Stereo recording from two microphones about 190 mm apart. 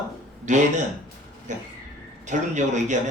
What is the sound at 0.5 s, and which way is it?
A man's voice, 40° right (ahead or behind).